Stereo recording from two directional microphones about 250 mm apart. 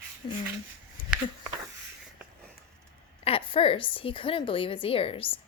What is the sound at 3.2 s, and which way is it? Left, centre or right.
Speech, left.